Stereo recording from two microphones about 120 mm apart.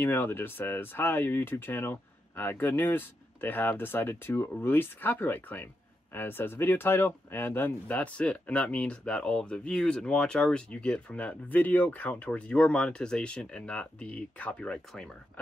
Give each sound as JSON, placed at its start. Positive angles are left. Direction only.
{"t": 0.0, "sound": "speech", "side_deg": 20}